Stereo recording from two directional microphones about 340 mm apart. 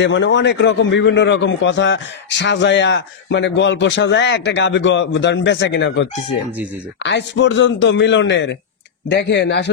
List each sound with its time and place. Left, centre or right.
0.0 s a man's voice: left